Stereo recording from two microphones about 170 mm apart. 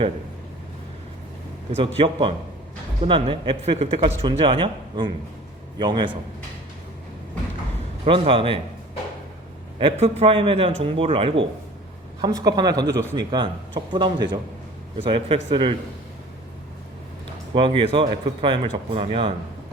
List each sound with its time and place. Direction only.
2.0 s a man's voice: 30° right (ahead or behind)
8.0 s a man's voice: 30° right (ahead or behind)
9.8 s a man's voice: 35° right (ahead or behind)
17.5 s speech: 30° right (ahead or behind)